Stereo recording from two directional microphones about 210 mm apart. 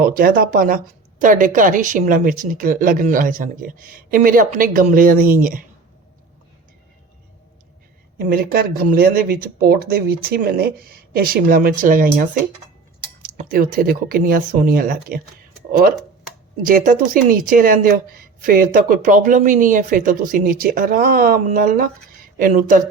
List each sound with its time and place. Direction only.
0.0 s a woman's voice: 45° right (ahead or behind)
8.2 s a woman's voice: 45° right (ahead or behind)